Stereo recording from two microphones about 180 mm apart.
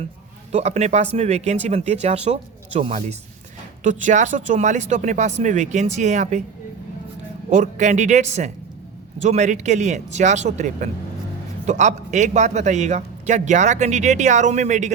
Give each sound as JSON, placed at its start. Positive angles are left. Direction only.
{"t": 0.5, "sound": "a man's voice", "side_deg": -40}
{"t": 7.5, "sound": "a man's voice", "side_deg": -40}